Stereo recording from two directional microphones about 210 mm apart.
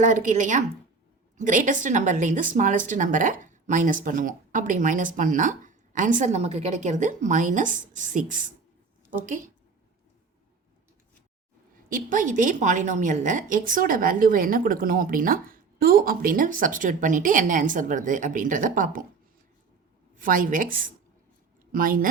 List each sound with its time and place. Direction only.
0.0 s a woman's voice: 40° right (ahead or behind)
11.9 s a woman's voice: 40° right (ahead or behind)
20.1 s a woman's voice: 40° right (ahead or behind)